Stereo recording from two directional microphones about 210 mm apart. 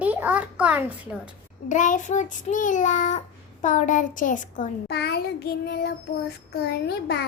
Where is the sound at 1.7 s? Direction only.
35° left (ahead or behind).